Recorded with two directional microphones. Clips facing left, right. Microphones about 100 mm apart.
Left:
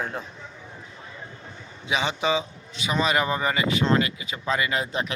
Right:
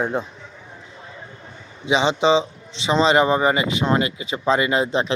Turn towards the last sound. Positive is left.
turn(degrees=-25)  # may be behind; listen again after turning